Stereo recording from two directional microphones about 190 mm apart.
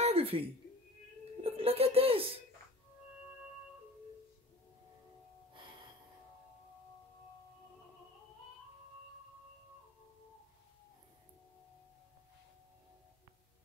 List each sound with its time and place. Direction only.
0.0 s a sound: 30° right (ahead or behind)
1.4 s speech: 30° right (ahead or behind)
5.5 s gasp: 25° right (ahead or behind)